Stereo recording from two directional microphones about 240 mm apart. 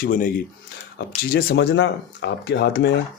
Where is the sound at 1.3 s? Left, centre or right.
Left.